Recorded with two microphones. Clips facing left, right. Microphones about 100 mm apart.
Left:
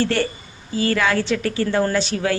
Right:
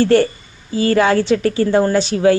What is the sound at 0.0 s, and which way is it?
A woman's voice, 30° right (ahead or behind).